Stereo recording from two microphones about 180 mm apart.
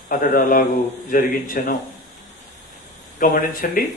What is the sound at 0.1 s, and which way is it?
A man's voice, 50° left (ahead or behind).